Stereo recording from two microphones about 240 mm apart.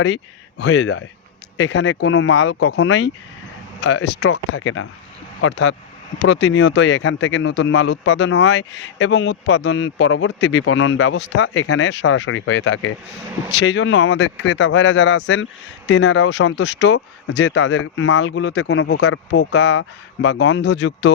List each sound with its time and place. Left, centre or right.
0.6 s speech: left